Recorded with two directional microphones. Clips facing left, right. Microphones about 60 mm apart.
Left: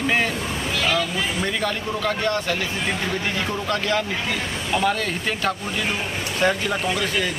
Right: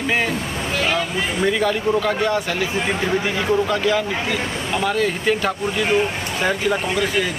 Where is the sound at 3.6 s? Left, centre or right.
Centre.